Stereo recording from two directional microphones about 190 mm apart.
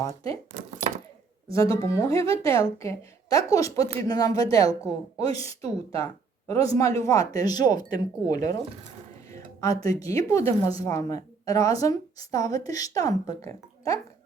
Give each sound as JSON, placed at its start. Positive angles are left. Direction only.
{"t": 1.5, "sound": "a woman's voice", "side_deg": 15}
{"t": 4.7, "sound": "a woman's voice", "side_deg": -10}
{"t": 5.3, "sound": "a woman's voice", "side_deg": 15}